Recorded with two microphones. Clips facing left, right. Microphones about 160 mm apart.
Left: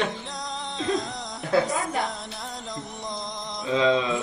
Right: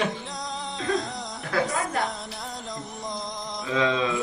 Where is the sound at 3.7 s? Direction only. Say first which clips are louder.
Left 3 dB; 25° left (ahead or behind).